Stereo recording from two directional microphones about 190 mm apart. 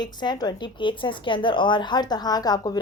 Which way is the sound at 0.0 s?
20° left (ahead or behind).